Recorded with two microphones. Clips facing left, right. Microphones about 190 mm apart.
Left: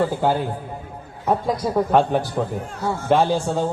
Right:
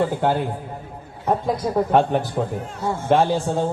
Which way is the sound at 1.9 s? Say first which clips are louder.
Even; centre (ahead or behind).